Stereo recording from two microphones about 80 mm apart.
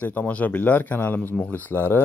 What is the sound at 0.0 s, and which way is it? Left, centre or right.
Speech, centre.